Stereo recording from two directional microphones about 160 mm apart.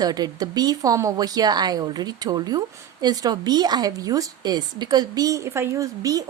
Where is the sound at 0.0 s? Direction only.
25° right (ahead or behind).